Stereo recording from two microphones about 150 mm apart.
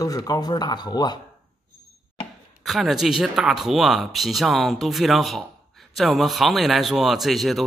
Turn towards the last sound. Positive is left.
turn(degrees=0)  # may be behind; listen again after turning